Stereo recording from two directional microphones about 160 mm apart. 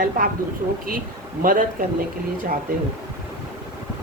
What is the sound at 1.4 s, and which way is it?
Speech, 60° right (ahead or behind).